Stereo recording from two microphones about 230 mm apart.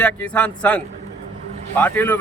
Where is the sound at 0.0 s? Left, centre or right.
Centre.